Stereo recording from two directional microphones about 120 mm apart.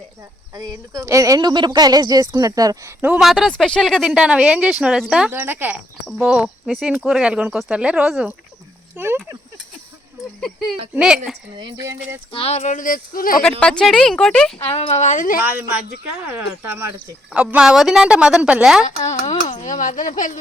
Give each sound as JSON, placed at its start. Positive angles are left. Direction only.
{"t": 0.5, "sound": "speech", "side_deg": -30}
{"t": 3.2, "sound": "speech", "side_deg": 0}
{"t": 5.3, "sound": "speech", "side_deg": -15}
{"t": 6.1, "sound": "speech", "side_deg": -5}
{"t": 9.0, "sound": "speech", "side_deg": -20}
{"t": 10.9, "sound": "speech", "side_deg": -5}
{"t": 11.8, "sound": "speech", "side_deg": -25}
{"t": 12.3, "sound": "speech", "side_deg": 55}
{"t": 13.6, "sound": "speech", "side_deg": 5}
{"t": 14.7, "sound": "speech", "side_deg": 55}
{"t": 15.4, "sound": "speech", "side_deg": -15}
{"t": 19.0, "sound": "speech", "side_deg": 75}
{"t": 19.6, "sound": "speech", "side_deg": 90}